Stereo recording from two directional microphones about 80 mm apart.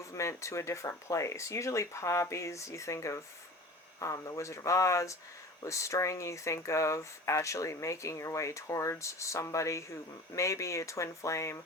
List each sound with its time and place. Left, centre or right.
0.0 s speech: left